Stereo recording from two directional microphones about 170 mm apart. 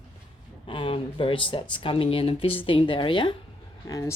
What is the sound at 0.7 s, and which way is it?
Speech, 30° left (ahead or behind).